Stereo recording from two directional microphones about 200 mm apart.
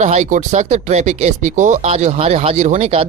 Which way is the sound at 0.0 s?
35° right (ahead or behind).